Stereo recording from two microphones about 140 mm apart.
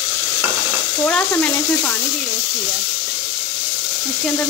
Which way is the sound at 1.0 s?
10° left (ahead or behind).